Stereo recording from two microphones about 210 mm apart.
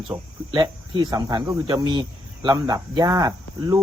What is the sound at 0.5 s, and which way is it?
Speech, 20° right (ahead or behind).